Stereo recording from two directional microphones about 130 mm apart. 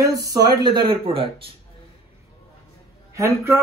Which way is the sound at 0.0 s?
25° right (ahead or behind).